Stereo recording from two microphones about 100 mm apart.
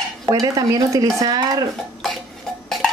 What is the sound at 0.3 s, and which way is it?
Speech, 35° right (ahead or behind).